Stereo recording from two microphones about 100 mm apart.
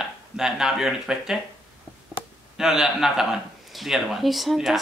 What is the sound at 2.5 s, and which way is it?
Speech, 5° right (ahead or behind).